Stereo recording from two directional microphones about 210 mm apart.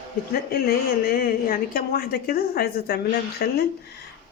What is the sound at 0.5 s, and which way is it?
A woman's voice, 45° left (ahead or behind).